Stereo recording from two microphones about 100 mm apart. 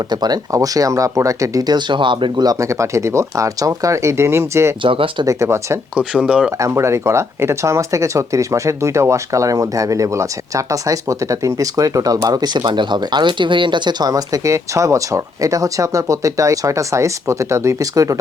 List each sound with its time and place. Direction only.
0.1 s speech: 45° right (ahead or behind)
2.5 s speech: 30° right (ahead or behind)
4.8 s speech: 60° right (ahead or behind)
5.2 s speech: 30° right (ahead or behind)
6.0 s speech: 10° right (ahead or behind)
6.6 s speech: 30° right (ahead or behind)